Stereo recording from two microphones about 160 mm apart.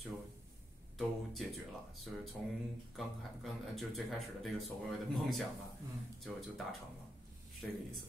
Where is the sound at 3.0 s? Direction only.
Centre (ahead or behind).